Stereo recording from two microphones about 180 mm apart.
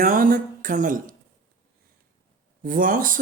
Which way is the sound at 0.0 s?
50° right (ahead or behind).